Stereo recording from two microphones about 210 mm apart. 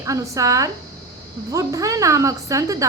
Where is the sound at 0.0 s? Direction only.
15° right (ahead or behind).